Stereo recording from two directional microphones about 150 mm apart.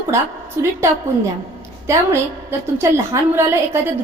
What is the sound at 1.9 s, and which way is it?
A woman's voice, 15° right (ahead or behind).